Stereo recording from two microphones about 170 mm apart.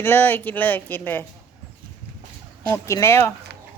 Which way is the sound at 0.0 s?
10° left (ahead or behind).